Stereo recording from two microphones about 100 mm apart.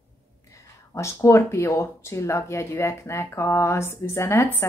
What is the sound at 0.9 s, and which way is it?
Speech, 30° left (ahead or behind).